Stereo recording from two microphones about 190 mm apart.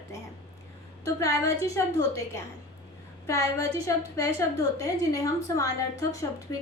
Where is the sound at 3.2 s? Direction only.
15° left (ahead or behind).